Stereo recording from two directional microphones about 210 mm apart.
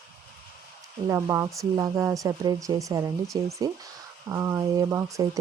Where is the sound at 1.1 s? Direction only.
15° right (ahead or behind).